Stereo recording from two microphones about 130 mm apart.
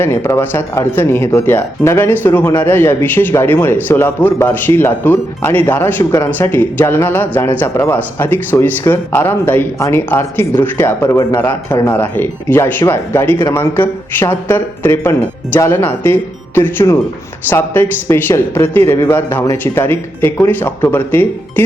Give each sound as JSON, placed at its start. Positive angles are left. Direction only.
{"t": 0.0, "sound": "a man's voice", "side_deg": 20}